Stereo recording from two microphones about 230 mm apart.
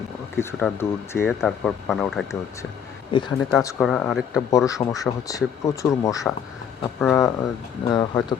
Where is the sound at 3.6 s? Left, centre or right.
Centre.